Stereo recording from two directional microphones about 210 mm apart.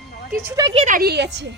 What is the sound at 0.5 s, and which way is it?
A woman's voice, 25° right (ahead or behind).